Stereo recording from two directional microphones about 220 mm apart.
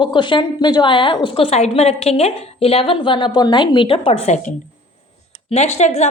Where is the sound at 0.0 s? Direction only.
20° left (ahead or behind).